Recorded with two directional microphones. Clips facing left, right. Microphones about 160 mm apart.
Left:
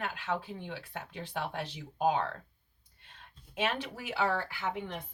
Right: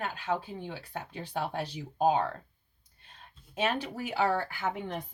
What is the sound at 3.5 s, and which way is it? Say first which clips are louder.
Speech: right 3 dB; 40° right (ahead or behind).